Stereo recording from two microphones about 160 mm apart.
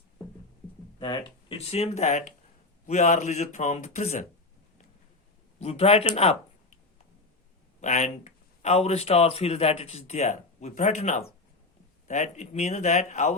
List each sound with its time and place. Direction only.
0.9 s speech: 30° left (ahead or behind)
1.5 s speech: 40° left (ahead or behind)
5.5 s speech: 40° left (ahead or behind)
7.8 s speech: 45° left (ahead or behind)